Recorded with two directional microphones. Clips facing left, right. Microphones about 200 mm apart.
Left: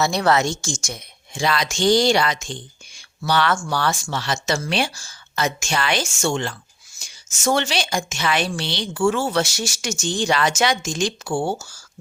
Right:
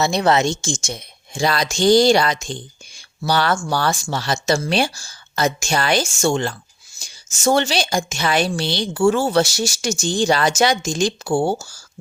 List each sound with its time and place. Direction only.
0.0 s a woman's voice: 20° right (ahead or behind)
1.3 s a woman's voice: 35° right (ahead or behind)